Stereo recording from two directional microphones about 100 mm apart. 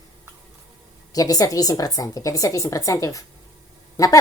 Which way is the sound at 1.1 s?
40° left (ahead or behind).